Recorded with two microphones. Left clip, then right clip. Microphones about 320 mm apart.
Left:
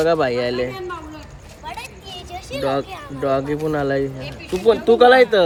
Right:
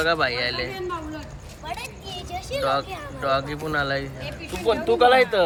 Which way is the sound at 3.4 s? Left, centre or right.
Left.